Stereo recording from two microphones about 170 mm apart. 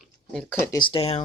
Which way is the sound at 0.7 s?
30° left (ahead or behind).